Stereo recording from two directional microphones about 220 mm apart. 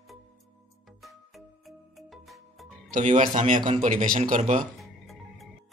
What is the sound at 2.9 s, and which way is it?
A man's voice, 35° right (ahead or behind).